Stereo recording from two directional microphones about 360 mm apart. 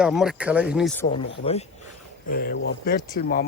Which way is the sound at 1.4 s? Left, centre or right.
Centre.